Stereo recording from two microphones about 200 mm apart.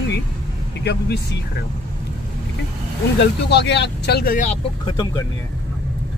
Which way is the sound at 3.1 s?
60° left (ahead or behind).